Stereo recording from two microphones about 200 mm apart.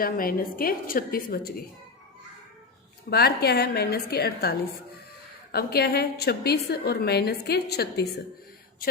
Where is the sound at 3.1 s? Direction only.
50° left (ahead or behind).